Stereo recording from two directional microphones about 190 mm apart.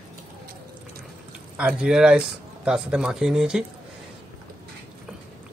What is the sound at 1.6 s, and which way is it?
Speech, 5° right (ahead or behind).